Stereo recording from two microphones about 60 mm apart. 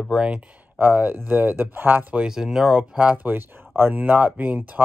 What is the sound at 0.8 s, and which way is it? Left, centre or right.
Speech, right.